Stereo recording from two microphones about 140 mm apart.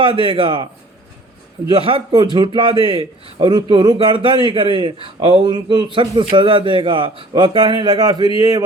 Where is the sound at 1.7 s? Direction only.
40° right (ahead or behind).